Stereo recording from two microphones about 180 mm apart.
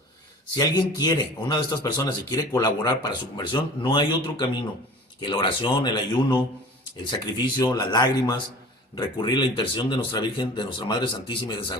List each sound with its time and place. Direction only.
0.5 s speech: 20° left (ahead or behind)